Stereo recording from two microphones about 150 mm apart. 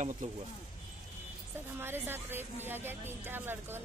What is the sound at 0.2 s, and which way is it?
Speech, 55° right (ahead or behind).